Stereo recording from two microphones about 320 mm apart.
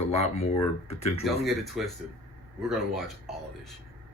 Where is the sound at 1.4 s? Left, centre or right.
Centre.